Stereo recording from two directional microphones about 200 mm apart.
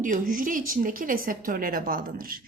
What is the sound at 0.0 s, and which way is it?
A woman's voice, 40° right (ahead or behind).